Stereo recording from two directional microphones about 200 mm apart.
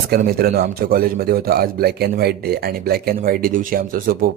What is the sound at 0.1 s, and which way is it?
Speech, 50° right (ahead or behind).